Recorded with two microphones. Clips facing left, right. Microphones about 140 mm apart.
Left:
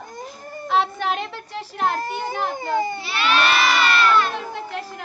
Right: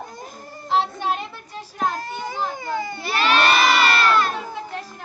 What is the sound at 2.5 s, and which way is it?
Speech, 25° left (ahead or behind).